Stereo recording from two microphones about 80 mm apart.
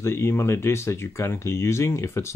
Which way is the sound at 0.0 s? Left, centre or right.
Left.